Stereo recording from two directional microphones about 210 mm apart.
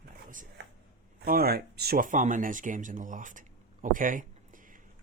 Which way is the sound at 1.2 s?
45° right (ahead or behind).